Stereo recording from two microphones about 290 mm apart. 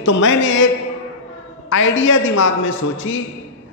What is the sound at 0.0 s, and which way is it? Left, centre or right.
Speech, left.